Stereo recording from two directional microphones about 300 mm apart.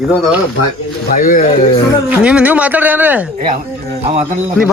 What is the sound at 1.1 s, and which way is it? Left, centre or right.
Speech, left.